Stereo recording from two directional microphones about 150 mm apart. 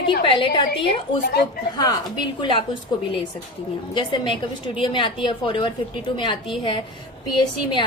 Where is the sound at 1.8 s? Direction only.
30° left (ahead or behind).